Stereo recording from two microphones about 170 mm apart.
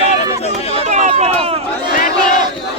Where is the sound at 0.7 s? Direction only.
45° right (ahead or behind).